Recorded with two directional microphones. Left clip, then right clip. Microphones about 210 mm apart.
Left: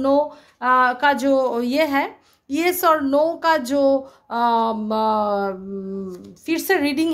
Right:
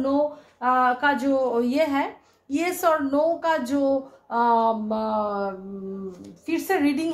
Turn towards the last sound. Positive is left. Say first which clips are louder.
# left 4 dB
turn(degrees=40)  # may be behind; listen again after turning